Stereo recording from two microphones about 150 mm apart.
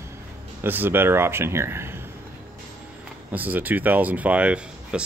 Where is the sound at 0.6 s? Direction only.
15° right (ahead or behind).